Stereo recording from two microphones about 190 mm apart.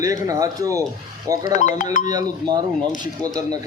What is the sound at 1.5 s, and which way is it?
Speech, 40° left (ahead or behind).